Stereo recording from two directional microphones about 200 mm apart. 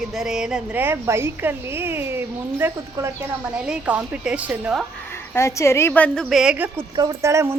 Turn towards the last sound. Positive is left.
turn(degrees=-15)  # may be behind; listen again after turning